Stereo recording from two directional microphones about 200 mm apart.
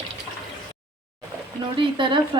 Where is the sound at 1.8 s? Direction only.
25° right (ahead or behind).